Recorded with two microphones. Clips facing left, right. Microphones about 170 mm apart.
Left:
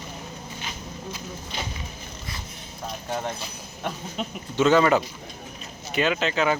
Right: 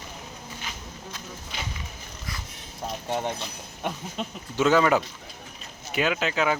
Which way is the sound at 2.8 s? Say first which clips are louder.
Right 1 dB; 5° right (ahead or behind).